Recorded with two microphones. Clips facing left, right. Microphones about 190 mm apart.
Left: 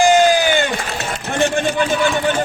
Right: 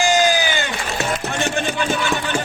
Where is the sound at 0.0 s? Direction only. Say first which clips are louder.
Left 5 dB; 55° left (ahead or behind).